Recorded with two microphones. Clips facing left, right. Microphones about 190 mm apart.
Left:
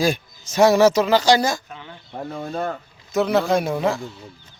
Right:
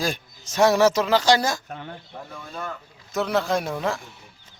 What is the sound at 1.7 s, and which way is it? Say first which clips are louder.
Speech: right 3 dB; 50° right (ahead or behind).